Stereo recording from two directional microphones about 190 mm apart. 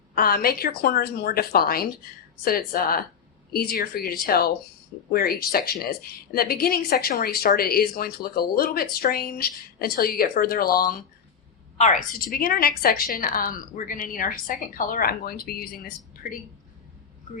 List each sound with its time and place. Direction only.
0.2 s speech: 50° left (ahead or behind)
11.8 s speech: 45° left (ahead or behind)